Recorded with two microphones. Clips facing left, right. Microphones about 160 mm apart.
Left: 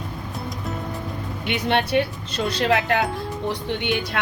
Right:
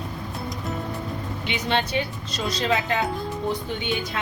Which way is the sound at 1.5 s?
60° left (ahead or behind).